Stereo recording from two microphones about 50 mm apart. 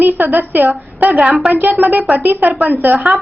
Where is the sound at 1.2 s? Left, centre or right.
Centre.